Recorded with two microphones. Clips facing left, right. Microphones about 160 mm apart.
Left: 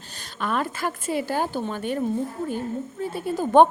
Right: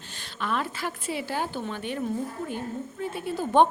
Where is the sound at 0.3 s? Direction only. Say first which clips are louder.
Left 3 dB; 45° left (ahead or behind).